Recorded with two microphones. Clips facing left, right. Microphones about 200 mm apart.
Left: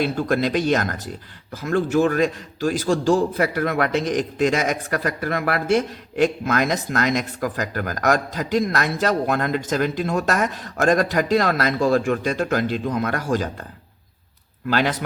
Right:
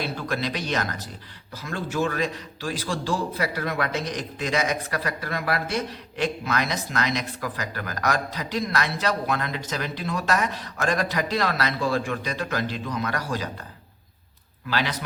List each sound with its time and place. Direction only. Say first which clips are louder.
0.0 s a man's voice: left 8 dB; 50° left (ahead or behind)
14.7 s a man's voice: left 6 dB; 50° left (ahead or behind)